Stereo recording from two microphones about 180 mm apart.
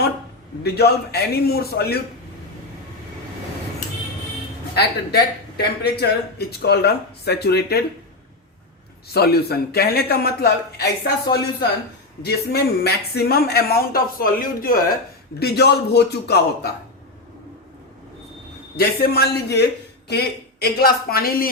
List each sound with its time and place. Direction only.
0.6 s speech: 65° left (ahead or behind)
4.7 s speech: 65° left (ahead or behind)
9.1 s speech: 60° left (ahead or behind)
15.4 s speech: 65° left (ahead or behind)
18.8 s speech: 55° left (ahead or behind)